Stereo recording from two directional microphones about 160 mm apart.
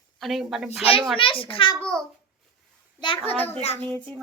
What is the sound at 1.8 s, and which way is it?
Speech, 5° left (ahead or behind).